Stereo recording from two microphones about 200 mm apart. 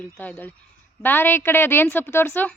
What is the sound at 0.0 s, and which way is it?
A woman's voice, 10° left (ahead or behind).